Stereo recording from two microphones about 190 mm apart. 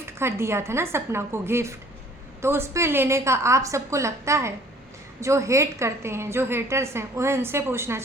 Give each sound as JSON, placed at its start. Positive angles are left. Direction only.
{"t": 0.0, "sound": "a woman's voice", "side_deg": -15}